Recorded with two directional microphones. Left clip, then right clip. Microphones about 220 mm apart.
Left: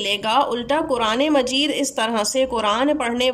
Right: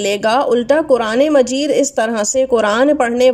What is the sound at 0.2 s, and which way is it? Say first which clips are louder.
Speech: right 7 dB; 15° right (ahead or behind).